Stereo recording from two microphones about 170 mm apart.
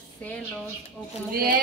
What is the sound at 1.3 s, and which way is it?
Speech, 60° right (ahead or behind).